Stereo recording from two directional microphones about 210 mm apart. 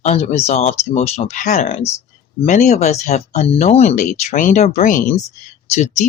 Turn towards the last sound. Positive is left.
turn(degrees=35)  # may be behind; listen again after turning